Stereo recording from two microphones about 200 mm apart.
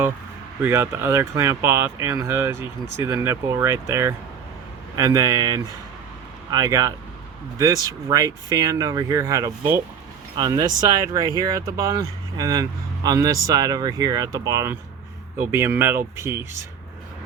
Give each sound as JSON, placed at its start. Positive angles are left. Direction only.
{"t": 0.6, "sound": "speech", "side_deg": -10}